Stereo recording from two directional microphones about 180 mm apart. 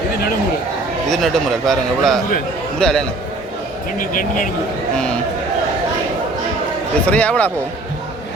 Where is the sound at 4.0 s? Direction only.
50° left (ahead or behind).